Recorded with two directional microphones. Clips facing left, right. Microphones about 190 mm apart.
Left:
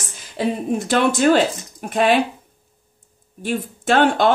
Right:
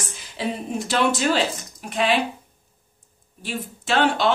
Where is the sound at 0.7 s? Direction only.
50° left (ahead or behind).